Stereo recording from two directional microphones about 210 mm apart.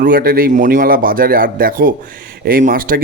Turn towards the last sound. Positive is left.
turn(degrees=-40)  # may be behind; listen again after turning